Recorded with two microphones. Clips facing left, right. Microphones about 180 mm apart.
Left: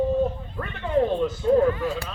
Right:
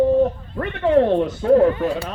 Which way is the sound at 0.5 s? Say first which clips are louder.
Right 7 dB; 75° right (ahead or behind).